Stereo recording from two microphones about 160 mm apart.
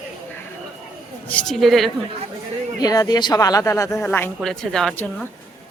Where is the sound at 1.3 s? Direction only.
5° left (ahead or behind).